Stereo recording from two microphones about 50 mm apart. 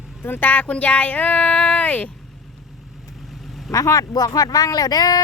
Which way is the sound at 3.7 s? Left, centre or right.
Centre.